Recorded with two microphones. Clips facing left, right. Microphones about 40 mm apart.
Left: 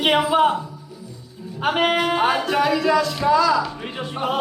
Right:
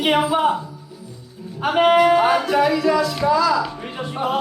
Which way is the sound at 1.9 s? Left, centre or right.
Left.